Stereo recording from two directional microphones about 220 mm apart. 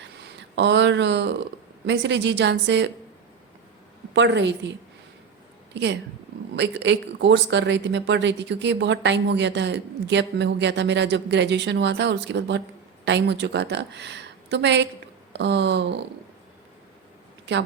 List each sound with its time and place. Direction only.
0.0 s a sound: 55° right (ahead or behind)
1.9 s speech: 55° right (ahead or behind)
4.1 s speech: 55° right (ahead or behind)
5.7 s speech: 55° right (ahead or behind)